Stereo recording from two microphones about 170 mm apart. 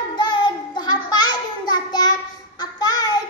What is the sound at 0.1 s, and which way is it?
Child singing, 25° left (ahead or behind).